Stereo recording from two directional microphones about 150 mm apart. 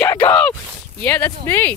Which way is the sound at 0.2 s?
10° left (ahead or behind).